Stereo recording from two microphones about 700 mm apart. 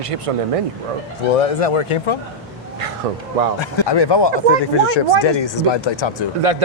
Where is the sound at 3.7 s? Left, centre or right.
Left.